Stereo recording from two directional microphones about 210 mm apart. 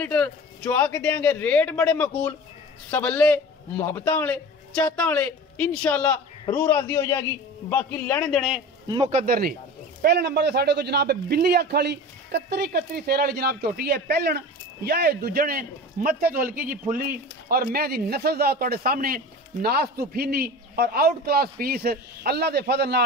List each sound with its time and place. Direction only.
0.0 s a man's voice: 5° left (ahead or behind)
8.8 s a man's voice: 20° right (ahead or behind)
9.1 s speech: 45° right (ahead or behind)